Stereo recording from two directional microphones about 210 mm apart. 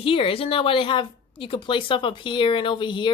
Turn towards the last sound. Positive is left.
turn(degrees=20)  # may be behind; listen again after turning